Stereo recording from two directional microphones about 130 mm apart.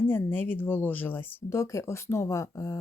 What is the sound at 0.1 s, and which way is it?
Speech, 15° left (ahead or behind).